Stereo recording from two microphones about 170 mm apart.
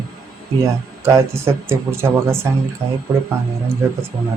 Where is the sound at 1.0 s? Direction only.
15° right (ahead or behind).